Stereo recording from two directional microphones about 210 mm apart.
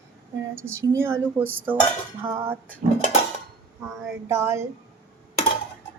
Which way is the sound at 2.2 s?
20° right (ahead or behind).